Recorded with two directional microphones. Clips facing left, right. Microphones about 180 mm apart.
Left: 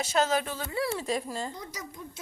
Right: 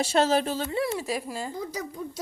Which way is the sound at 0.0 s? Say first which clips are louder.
Right 4 dB; 30° right (ahead or behind).